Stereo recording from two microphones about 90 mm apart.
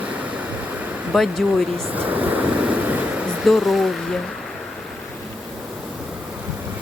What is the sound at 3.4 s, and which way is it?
Speech, centre (ahead or behind).